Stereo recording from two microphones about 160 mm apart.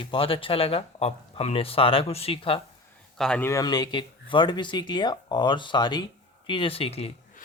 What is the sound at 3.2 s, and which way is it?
Speech, 5° left (ahead or behind).